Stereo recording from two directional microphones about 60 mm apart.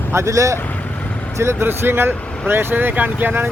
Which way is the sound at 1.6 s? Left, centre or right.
Right.